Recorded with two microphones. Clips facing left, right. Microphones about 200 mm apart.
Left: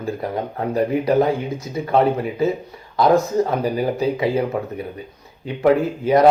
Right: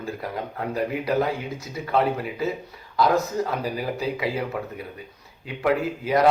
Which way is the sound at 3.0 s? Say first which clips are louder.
Left 6 dB; 25° left (ahead or behind).